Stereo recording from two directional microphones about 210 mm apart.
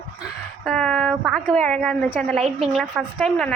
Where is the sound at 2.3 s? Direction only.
30° right (ahead or behind).